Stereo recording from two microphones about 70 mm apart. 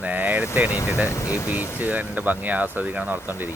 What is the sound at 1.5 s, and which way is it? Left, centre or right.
Speech, right.